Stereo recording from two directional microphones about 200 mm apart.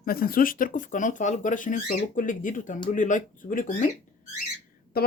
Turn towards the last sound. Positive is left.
turn(degrees=50)  # may be behind; listen again after turning